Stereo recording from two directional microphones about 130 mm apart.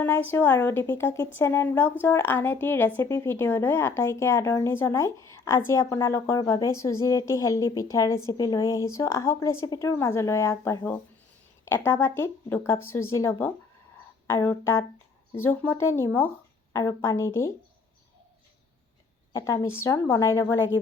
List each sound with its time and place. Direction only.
0.0 s a woman's voice: 15° left (ahead or behind)
19.3 s a woman's voice: 25° left (ahead or behind)